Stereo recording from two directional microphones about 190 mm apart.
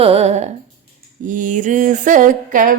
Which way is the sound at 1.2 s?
45° right (ahead or behind).